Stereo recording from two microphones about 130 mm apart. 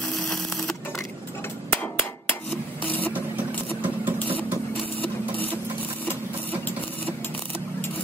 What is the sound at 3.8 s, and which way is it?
Vehicle, 15° right (ahead or behind).